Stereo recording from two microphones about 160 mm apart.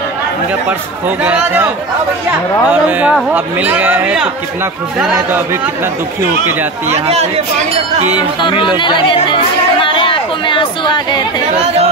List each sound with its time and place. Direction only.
1.2 s speech: 10° right (ahead or behind)
2.7 s speech: 10° right (ahead or behind)
7.1 s speech: 40° right (ahead or behind)
8.2 s chatter: 30° left (ahead or behind)